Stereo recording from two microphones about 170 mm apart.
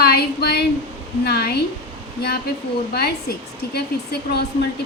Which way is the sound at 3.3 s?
65° left (ahead or behind).